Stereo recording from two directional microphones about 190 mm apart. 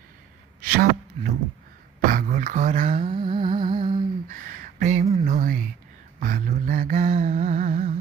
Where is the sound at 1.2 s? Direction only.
35° right (ahead or behind).